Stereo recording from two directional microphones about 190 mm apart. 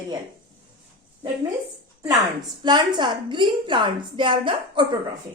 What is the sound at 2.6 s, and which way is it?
A woman's voice, 25° right (ahead or behind).